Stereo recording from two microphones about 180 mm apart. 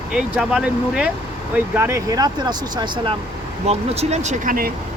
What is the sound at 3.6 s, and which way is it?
Speech, 35° right (ahead or behind).